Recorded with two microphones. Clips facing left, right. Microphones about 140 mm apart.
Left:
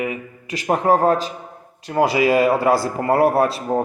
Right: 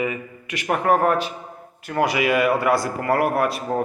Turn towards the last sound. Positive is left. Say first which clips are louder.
# left 4 dB
turn(degrees=30)  # may be behind; listen again after turning